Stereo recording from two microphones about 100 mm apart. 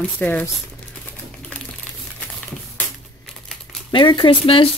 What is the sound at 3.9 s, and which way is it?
Speech, 50° left (ahead or behind).